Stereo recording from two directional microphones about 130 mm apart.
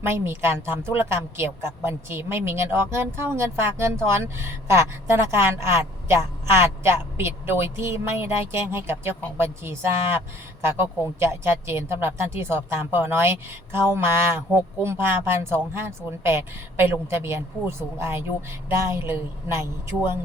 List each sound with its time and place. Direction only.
0.0 s a woman's voice: 20° right (ahead or behind)